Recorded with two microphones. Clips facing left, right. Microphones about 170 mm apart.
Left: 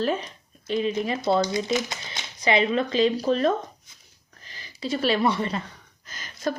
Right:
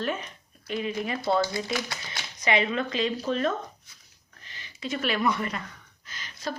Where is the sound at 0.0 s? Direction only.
35° left (ahead or behind).